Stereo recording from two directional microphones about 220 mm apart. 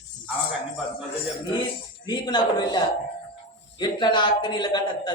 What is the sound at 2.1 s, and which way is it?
A man's voice, 20° left (ahead or behind).